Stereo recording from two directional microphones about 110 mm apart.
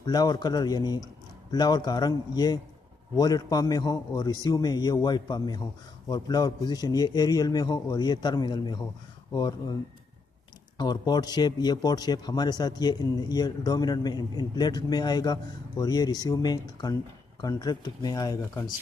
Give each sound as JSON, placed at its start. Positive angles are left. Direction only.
{"t": 0.0, "sound": "a man's voice", "side_deg": 40}
{"t": 10.8, "sound": "a man's voice", "side_deg": 40}